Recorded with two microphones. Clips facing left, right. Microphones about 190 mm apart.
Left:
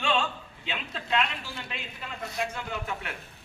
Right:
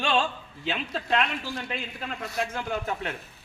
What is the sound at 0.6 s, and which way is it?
Speech, 40° right (ahead or behind).